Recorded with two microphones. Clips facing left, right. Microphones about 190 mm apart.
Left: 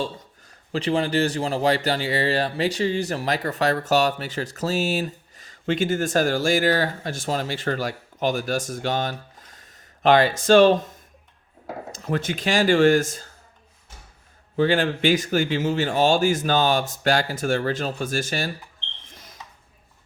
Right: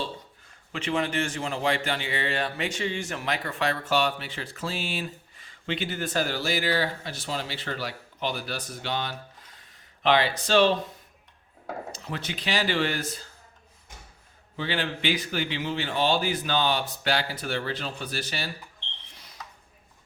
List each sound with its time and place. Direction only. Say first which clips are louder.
0.4 s a man's voice: left 8 dB; 35° left (ahead or behind)
14.5 s a man's voice: left 10 dB; 45° left (ahead or behind)
19.0 s a sound: left 5 dB; 45° left (ahead or behind)